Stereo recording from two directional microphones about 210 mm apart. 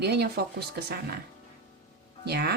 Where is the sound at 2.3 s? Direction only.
50° right (ahead or behind).